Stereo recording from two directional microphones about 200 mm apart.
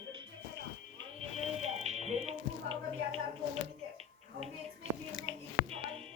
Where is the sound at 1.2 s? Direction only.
30° right (ahead or behind).